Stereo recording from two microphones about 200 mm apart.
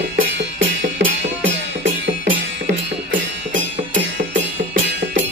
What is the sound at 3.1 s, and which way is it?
Music, 70° right (ahead or behind).